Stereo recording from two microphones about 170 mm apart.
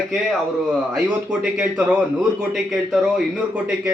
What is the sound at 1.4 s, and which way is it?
A man's voice, 5° right (ahead or behind).